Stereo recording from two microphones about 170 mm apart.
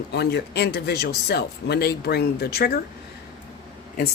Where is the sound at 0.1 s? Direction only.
75° left (ahead or behind).